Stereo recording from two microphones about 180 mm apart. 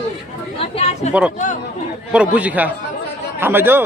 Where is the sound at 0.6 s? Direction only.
35° left (ahead or behind).